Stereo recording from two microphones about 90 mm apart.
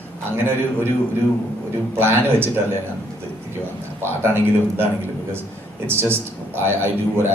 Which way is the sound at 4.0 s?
25° right (ahead or behind).